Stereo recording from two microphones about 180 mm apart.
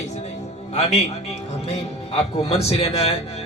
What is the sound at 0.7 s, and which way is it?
A man's voice, 35° left (ahead or behind).